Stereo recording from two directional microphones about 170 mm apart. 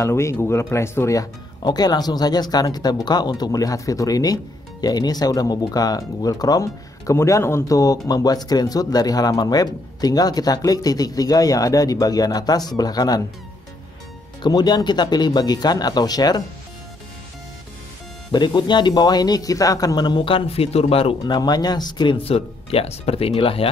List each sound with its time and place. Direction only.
0.0 s speech: 15° left (ahead or behind)
14.4 s speech: 25° left (ahead or behind)
18.3 s speech: 25° left (ahead or behind)